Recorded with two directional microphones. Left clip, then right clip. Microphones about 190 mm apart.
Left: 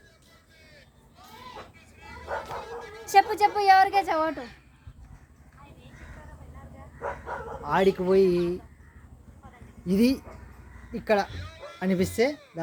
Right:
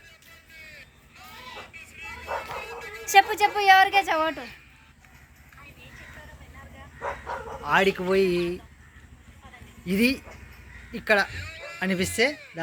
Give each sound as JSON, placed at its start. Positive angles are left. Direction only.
{"t": 0.6, "sound": "vehicle", "side_deg": 20}
{"t": 1.7, "sound": "bow-wow", "side_deg": 20}
{"t": 3.0, "sound": "a woman's voice", "side_deg": -5}
{"t": 7.0, "sound": "bow-wow", "side_deg": -10}
{"t": 7.7, "sound": "speech", "side_deg": 15}
{"t": 9.8, "sound": "speech", "side_deg": 15}